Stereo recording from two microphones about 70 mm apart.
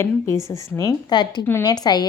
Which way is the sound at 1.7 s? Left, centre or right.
Left.